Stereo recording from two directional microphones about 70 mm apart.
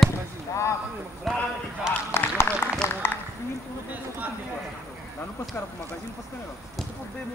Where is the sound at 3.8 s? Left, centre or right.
Right.